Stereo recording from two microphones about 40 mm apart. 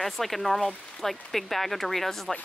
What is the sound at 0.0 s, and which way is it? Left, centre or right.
Speech, centre.